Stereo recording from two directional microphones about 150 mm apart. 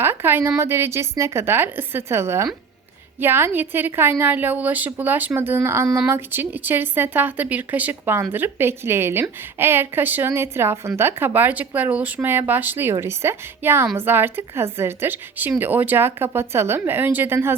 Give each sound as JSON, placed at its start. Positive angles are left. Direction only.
{"t": 0.0, "sound": "speech", "side_deg": -15}